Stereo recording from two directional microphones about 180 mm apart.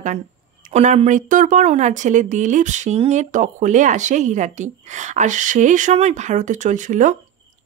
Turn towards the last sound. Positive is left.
turn(degrees=-45)  # may be behind; listen again after turning